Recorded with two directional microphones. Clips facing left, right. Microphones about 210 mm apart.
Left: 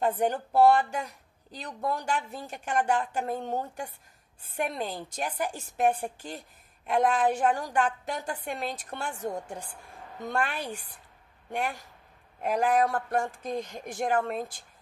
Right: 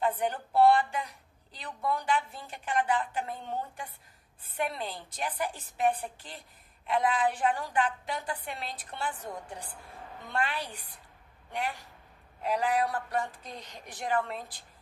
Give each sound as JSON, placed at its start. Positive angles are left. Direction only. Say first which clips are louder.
{"t": 0.0, "sound": "a woman's voice", "louder": "left 3 dB", "side_deg": 45}